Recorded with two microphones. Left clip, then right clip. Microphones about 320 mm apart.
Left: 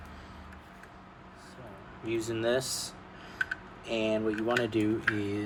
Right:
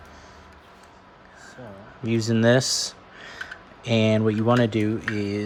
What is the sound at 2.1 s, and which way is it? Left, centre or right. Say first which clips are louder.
Speech: right 9 dB; centre.